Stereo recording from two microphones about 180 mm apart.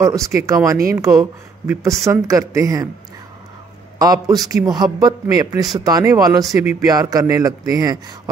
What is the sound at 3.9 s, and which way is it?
A man's voice, 20° right (ahead or behind).